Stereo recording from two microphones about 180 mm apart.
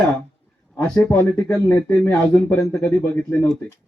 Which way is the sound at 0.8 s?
10° left (ahead or behind).